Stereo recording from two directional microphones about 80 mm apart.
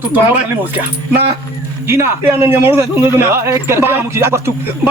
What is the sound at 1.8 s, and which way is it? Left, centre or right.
A man's voice, right.